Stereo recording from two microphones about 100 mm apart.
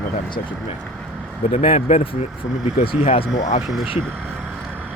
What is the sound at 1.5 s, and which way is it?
Speech, 80° left.